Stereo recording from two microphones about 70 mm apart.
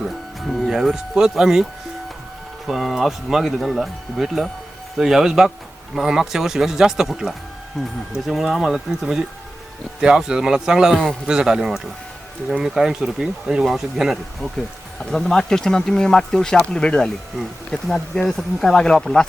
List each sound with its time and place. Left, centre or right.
0.0 s music: centre
2.6 s speech: centre
10.9 s speech: centre
11.3 s speech: centre